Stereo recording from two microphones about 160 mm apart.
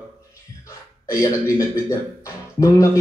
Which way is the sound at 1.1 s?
20° left (ahead or behind).